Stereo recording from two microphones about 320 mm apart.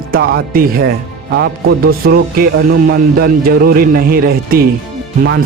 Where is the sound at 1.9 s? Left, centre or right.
Right.